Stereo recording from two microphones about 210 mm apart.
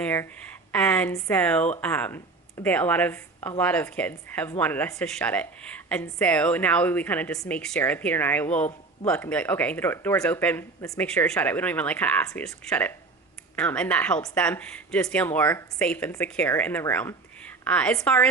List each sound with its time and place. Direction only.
0.0 s a woman's voice: 10° left (ahead or behind)
11.0 s a woman's voice: 5° left (ahead or behind)